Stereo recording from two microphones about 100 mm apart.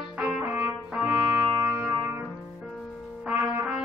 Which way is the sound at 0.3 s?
15° right (ahead or behind).